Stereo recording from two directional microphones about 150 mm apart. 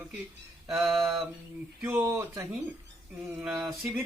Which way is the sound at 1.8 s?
10° right (ahead or behind).